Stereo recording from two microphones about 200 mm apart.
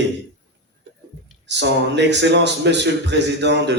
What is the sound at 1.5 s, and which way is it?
A man's voice, 60° right (ahead or behind).